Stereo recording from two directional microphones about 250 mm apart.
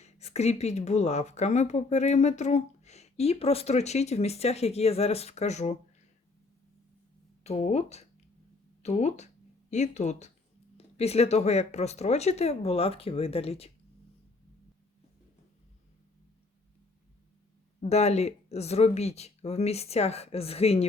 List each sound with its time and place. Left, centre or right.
0.0 s speech: left
7.4 s speech: left
17.7 s speech: left